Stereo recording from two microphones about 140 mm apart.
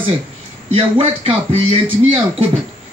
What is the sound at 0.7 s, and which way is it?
A man's voice, 40° right (ahead or behind).